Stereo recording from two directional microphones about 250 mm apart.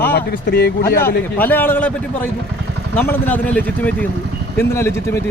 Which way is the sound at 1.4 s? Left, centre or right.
Centre.